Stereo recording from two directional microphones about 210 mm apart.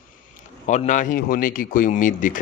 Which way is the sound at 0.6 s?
35° left (ahead or behind).